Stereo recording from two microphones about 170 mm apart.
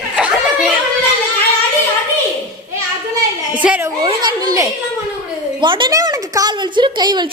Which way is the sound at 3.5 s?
10° right (ahead or behind).